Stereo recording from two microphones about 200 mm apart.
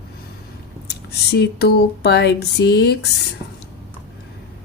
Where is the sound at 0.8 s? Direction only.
55° left (ahead or behind).